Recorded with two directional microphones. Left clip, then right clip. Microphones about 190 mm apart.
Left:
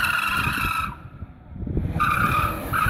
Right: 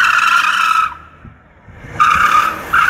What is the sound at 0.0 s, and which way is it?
Vehicle, centre (ahead or behind).